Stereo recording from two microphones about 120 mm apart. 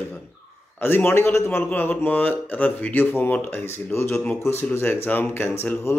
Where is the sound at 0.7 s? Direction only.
20° left (ahead or behind).